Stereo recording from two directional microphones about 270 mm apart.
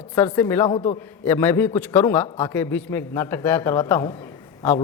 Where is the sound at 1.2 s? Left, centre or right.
Centre.